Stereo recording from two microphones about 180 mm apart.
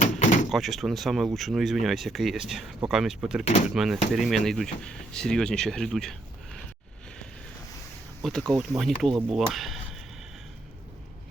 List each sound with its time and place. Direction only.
0.0 s door: 40° left (ahead or behind)
0.5 s speech: centre (ahead or behind)
8.2 s speech: 5° left (ahead or behind)